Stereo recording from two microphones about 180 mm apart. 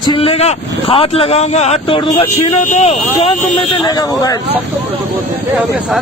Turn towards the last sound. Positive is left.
turn(degrees=20)  # may be behind; listen again after turning